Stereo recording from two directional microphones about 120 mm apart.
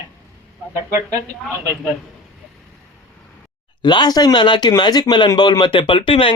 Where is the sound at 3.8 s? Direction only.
40° left (ahead or behind).